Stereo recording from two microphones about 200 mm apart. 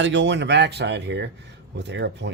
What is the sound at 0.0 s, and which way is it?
Speech, 65° right (ahead or behind).